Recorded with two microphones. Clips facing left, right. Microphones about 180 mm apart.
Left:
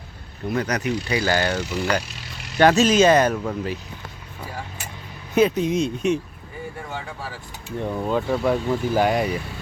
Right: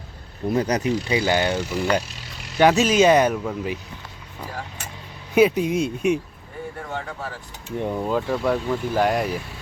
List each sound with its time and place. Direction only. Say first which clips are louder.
0.4 s speech: right 3 dB; 30° right (ahead or behind)
1.0 s speech: right 1 dB; 20° right (ahead or behind)
3.3 s speech: even; 5° right (ahead or behind)
5.3 s speech: right 1 dB; 10° right (ahead or behind)
7.8 s speech: right 1 dB; 15° right (ahead or behind)
8.0 s speech: left 2 dB; centre (ahead or behind)